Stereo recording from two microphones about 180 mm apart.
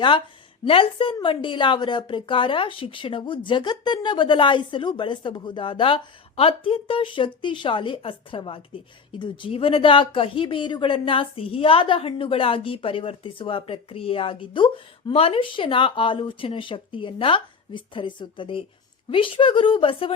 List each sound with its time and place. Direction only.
0.6 s a woman's voice: 30° left (ahead or behind)